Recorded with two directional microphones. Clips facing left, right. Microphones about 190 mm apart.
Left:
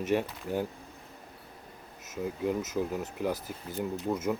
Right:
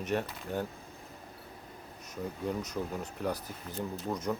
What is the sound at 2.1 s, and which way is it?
Speech, 5° left (ahead or behind).